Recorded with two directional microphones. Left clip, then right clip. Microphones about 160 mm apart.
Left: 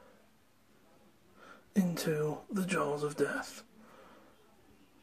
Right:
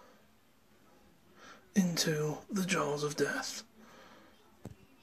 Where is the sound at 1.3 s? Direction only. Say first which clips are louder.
Right 1 dB; 5° left (ahead or behind).